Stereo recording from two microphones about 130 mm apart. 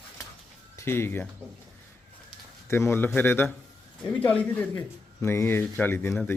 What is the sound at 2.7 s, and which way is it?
A man's voice, 20° left (ahead or behind).